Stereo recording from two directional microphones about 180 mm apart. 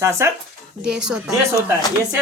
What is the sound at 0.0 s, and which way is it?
Speech, 15° right (ahead or behind).